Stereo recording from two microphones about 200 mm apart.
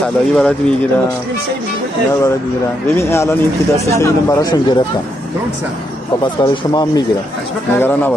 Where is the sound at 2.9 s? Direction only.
15° left (ahead or behind).